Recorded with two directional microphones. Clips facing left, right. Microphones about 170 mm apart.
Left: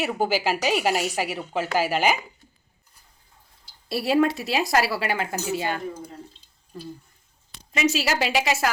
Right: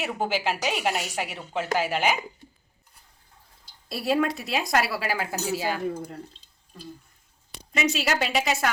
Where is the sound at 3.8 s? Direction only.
Centre (ahead or behind).